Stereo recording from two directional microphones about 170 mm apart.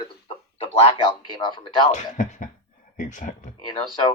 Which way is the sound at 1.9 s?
45° left (ahead or behind).